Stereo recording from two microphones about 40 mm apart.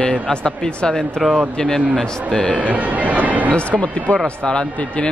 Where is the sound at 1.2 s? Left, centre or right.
Centre.